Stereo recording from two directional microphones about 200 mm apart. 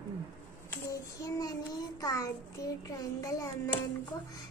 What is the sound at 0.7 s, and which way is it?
Child singing, 15° left (ahead or behind).